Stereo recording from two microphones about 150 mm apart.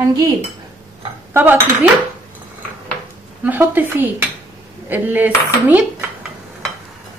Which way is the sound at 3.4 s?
10° right (ahead or behind).